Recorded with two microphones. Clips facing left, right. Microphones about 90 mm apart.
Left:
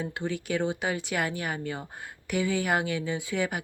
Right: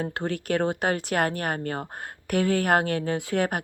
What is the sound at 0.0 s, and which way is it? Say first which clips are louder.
Speech: right 3 dB; 55° right (ahead or behind).